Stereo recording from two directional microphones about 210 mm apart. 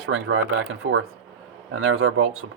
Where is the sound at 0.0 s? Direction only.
60° right (ahead or behind).